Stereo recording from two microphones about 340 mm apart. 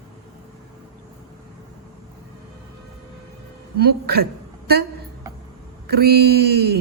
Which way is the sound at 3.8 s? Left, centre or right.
Right.